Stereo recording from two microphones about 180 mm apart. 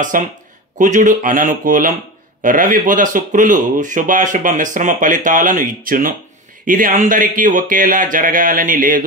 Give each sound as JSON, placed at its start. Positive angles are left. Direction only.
{"t": 0.0, "sound": "speech", "side_deg": -45}